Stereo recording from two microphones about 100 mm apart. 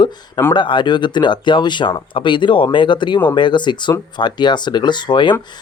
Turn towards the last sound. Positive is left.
turn(degrees=50)  # may be behind; listen again after turning